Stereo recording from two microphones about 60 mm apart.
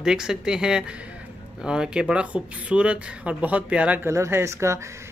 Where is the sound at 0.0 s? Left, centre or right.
Centre.